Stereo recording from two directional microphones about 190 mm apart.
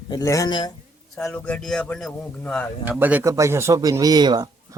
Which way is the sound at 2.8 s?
10° right (ahead or behind).